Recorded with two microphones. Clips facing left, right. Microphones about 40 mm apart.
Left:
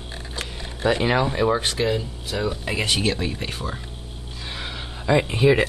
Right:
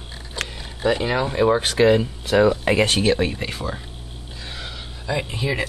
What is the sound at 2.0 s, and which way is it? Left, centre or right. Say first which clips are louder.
Speech: right 10 dB; right.